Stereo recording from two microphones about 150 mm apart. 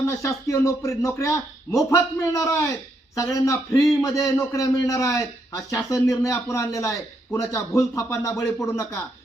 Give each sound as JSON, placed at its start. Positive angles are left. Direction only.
{"t": 0.2, "sound": "a man's voice", "side_deg": 20}